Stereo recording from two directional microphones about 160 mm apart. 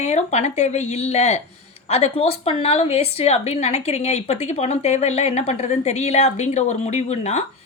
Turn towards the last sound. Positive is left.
turn(degrees=45)  # may be behind; listen again after turning